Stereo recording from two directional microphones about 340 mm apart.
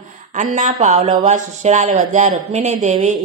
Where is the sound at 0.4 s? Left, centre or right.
Right.